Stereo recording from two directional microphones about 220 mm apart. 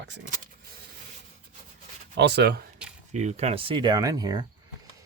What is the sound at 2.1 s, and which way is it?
Speech, 50° right (ahead or behind).